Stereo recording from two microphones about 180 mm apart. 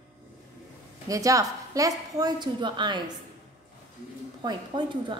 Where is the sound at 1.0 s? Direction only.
20° right (ahead or behind).